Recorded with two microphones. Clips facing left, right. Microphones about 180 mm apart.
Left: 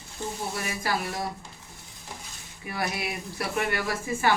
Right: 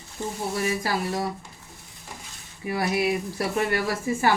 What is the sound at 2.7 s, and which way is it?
Speech, 30° right (ahead or behind).